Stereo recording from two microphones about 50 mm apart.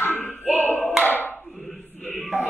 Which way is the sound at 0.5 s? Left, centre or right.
Left.